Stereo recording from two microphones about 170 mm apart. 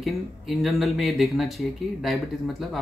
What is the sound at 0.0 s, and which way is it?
Speech, centre (ahead or behind).